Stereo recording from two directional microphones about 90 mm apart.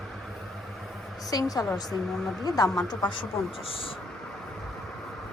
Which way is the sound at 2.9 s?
60° left (ahead or behind).